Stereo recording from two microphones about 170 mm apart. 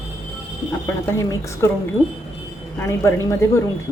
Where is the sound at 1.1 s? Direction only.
15° left (ahead or behind).